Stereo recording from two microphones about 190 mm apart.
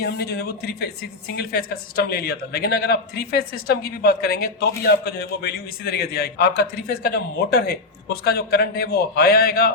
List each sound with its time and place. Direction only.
0.0 s a man's voice: 60° left (ahead or behind)